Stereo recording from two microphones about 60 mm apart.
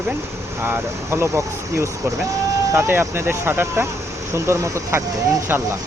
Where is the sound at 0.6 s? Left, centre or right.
Right.